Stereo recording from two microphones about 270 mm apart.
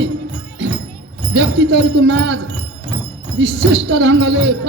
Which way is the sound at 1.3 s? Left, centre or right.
Right.